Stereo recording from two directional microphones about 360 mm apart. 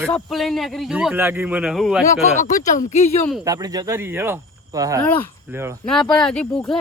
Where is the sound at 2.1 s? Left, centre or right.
Left.